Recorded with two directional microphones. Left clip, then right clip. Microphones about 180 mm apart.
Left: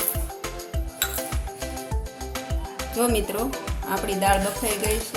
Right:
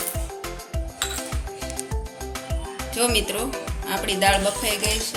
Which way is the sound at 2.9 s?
40° left (ahead or behind).